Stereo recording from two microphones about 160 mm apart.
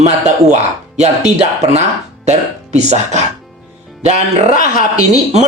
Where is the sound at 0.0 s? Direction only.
45° right (ahead or behind).